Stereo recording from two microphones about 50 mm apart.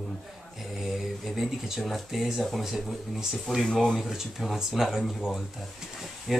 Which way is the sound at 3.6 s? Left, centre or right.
Centre.